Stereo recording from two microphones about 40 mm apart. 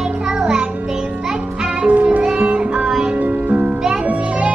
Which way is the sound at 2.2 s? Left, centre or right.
Right.